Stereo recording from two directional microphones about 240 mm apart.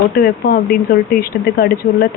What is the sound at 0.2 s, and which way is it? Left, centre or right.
A woman's voice, left.